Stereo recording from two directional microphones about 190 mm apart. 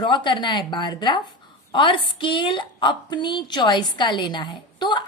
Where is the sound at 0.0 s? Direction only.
25° left (ahead or behind).